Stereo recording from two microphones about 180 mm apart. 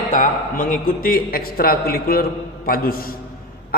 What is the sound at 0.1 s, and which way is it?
A man's voice, 50° left (ahead or behind).